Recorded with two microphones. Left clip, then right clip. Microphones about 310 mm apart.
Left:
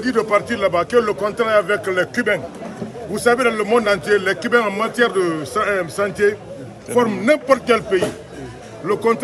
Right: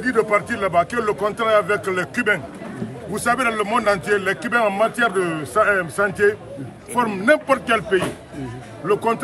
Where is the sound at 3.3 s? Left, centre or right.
Centre.